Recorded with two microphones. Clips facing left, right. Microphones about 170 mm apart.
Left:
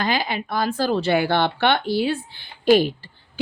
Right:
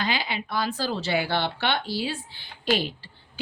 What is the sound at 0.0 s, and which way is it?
Speech, 50° left (ahead or behind).